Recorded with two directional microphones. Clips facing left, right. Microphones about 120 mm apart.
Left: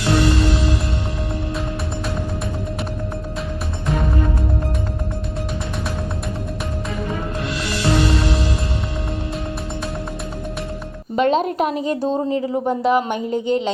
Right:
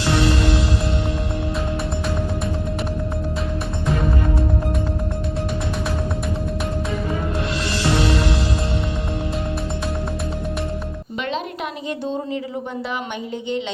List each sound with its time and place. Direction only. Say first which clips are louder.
11.2 s a woman's voice: left 9 dB; 40° left (ahead or behind)